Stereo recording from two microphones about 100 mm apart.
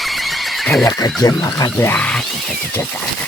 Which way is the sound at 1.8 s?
20° left (ahead or behind).